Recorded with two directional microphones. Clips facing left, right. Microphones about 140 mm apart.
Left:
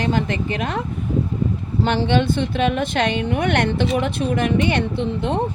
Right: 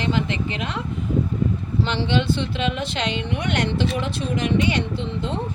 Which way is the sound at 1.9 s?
50° left (ahead or behind).